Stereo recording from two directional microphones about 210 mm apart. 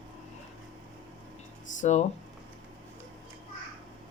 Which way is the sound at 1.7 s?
35° left (ahead or behind).